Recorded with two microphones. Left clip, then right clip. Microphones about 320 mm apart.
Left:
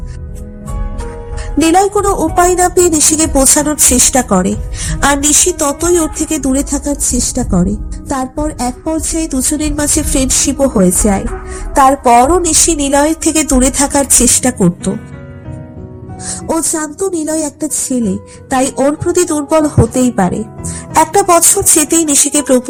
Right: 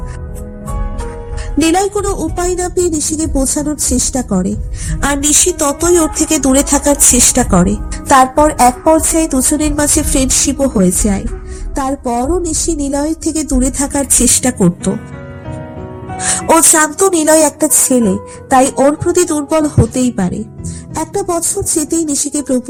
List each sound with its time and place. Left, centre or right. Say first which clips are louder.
1.5 s a woman's voice: left 3 dB; centre
11.7 s a woman's voice: left 10 dB; left; by 15.0 s centre
16.1 s speech: right 7 dB; right; by 20.7 s centre
20.9 s speech: left 9 dB; left